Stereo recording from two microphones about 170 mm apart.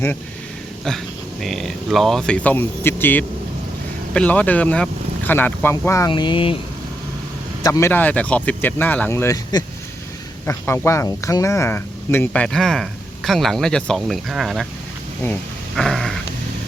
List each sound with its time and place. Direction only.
0.9 s speech: centre (ahead or behind)
6.1 s speech: 30° left (ahead or behind)
7.6 s speech: 15° left (ahead or behind); by 14.7 s centre (ahead or behind)
15.2 s dog: 5° left (ahead or behind)